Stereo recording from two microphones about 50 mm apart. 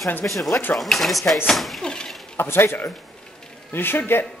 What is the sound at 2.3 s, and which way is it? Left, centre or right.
Speech, left.